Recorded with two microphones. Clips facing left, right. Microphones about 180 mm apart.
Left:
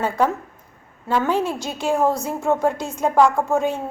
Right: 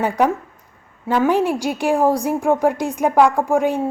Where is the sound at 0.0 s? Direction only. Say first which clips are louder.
Right 3 dB; 15° right (ahead or behind).